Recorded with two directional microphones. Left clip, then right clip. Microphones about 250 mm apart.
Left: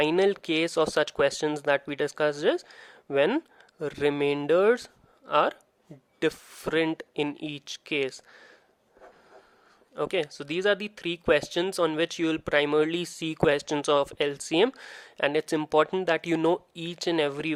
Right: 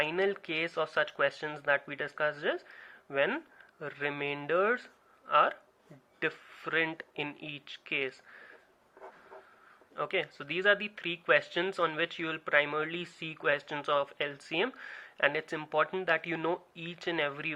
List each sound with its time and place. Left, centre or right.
0.0 s speech: left
9.9 s speech: left